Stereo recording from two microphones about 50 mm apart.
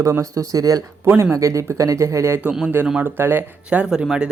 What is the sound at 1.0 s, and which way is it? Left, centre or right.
Speech, right.